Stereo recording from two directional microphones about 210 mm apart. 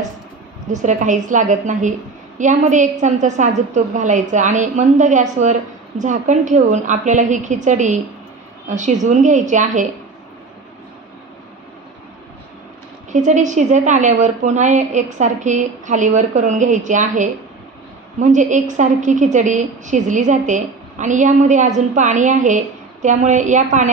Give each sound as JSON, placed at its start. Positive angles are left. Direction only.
{"t": 0.7, "sound": "a woman's voice", "side_deg": -35}
{"t": 13.1, "sound": "a woman's voice", "side_deg": -35}